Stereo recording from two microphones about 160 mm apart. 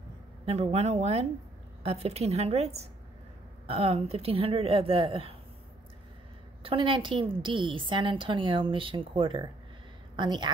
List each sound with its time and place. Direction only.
0.5 s a woman's voice: 40° right (ahead or behind)
6.6 s a woman's voice: 35° right (ahead or behind)